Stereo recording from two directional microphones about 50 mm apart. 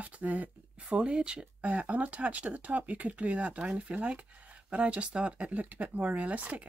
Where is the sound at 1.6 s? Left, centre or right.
Right.